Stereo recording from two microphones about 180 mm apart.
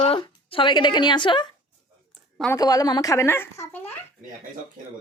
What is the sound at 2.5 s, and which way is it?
A woman's voice, 20° left (ahead or behind).